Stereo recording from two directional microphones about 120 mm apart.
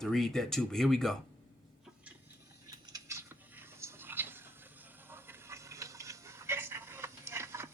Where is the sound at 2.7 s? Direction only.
30° right (ahead or behind).